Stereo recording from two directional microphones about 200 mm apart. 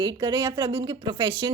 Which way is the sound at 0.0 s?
20° right (ahead or behind).